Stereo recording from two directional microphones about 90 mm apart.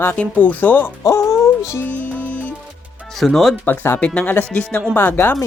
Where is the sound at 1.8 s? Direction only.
15° left (ahead or behind).